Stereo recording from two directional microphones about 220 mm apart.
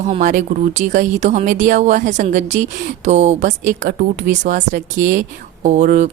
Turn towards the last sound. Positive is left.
turn(degrees=-30)  # may be behind; listen again after turning